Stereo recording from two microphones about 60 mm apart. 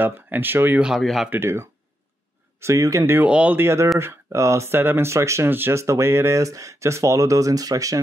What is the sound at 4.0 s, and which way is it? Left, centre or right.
Speech, right.